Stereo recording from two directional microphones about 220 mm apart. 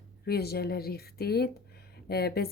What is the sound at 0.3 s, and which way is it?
Speech, 45° left (ahead or behind).